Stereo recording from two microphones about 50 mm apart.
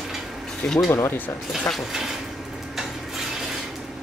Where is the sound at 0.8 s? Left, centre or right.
Left.